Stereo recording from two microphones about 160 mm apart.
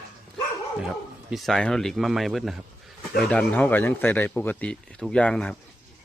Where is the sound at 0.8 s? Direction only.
Centre (ahead or behind).